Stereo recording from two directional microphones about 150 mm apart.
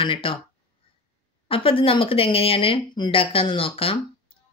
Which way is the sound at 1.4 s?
40° left (ahead or behind).